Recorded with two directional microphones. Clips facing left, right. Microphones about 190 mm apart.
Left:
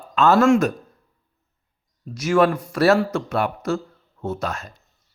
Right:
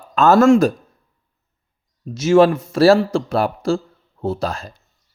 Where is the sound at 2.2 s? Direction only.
25° right (ahead or behind).